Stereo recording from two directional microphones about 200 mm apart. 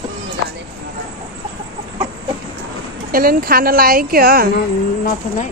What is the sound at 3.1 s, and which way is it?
A woman's voice, 45° right (ahead or behind).